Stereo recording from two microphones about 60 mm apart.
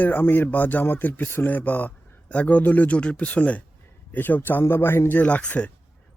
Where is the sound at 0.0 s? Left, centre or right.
Left.